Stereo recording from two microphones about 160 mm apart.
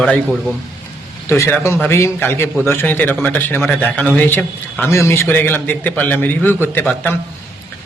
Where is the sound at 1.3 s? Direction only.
15° left (ahead or behind).